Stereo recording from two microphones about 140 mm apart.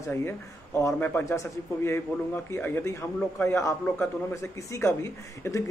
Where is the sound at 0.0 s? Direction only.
20° left (ahead or behind).